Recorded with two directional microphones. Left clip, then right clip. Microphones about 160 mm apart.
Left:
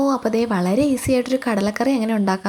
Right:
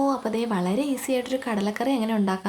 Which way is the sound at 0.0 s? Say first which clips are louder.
Left 5 dB; 30° left (ahead or behind).